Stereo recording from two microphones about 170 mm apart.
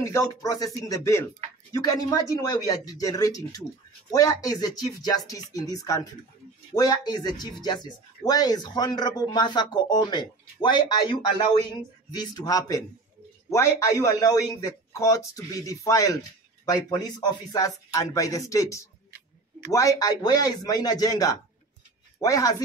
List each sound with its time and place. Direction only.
0.0 s speech: 20° left (ahead or behind)